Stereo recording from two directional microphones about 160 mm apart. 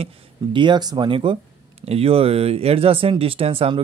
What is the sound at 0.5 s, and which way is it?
Speech, 30° right (ahead or behind).